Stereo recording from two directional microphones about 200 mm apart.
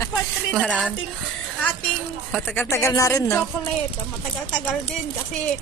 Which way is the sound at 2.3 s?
5° left (ahead or behind).